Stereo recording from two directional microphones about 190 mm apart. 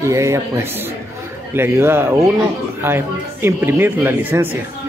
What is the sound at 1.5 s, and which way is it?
Speech, 10° right (ahead or behind).